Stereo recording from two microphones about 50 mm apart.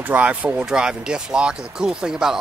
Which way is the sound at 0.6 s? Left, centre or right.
Centre.